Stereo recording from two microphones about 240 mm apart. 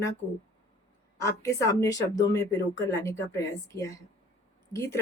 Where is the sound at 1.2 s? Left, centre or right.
Centre.